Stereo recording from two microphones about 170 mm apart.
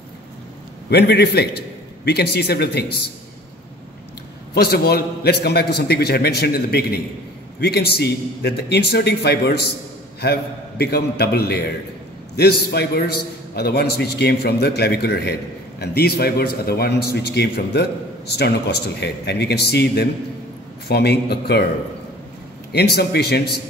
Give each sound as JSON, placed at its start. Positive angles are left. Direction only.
{"t": 0.8, "sound": "a man's voice", "side_deg": 75}
{"t": 4.6, "sound": "a man's voice", "side_deg": 70}
{"t": 22.7, "sound": "a man's voice", "side_deg": 70}